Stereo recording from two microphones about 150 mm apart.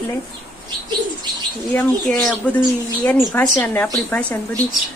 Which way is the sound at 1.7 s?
10° left (ahead or behind).